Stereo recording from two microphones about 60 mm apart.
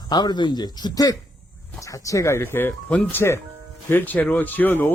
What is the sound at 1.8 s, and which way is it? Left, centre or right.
Speech, left.